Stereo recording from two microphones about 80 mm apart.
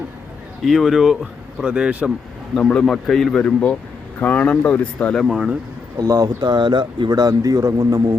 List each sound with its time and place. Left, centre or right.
0.6 s speech: centre
2.6 s speech: centre
2.8 s speech: centre
3.4 s speech: centre
5.2 s speech: centre
6.0 s a man's voice: right
6.4 s speech: right
7.1 s a man's voice: right